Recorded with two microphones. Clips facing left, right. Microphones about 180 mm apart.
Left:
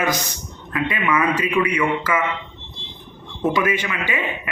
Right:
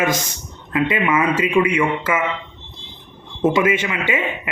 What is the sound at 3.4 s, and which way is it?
Speech, 20° right (ahead or behind).